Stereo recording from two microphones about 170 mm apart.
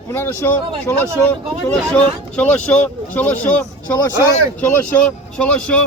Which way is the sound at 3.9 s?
20° left (ahead or behind).